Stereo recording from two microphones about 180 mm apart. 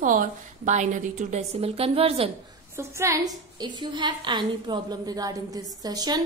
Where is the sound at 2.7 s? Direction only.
15° right (ahead or behind).